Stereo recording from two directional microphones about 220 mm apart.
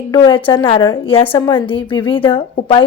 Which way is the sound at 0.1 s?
20° left (ahead or behind).